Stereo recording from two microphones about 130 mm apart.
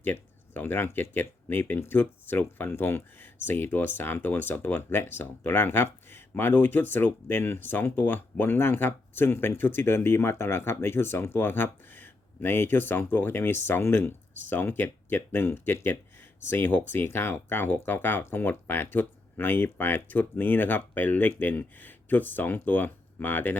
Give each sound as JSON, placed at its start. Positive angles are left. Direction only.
{"t": 0.0, "sound": "speech", "side_deg": 15}